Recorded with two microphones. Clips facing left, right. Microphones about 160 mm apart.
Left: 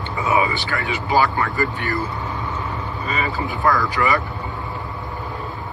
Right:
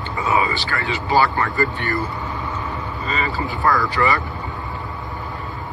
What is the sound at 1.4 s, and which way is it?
Speech, centre (ahead or behind).